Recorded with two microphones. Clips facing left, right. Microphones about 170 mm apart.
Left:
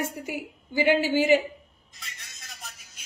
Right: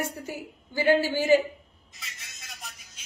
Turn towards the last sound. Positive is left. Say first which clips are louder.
# even
turn(degrees=0)  # may be behind; listen again after turning